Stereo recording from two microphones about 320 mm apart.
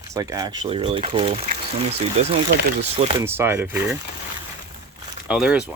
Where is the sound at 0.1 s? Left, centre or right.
Centre.